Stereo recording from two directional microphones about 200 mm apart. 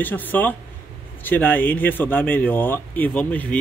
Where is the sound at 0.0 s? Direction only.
10° left (ahead or behind).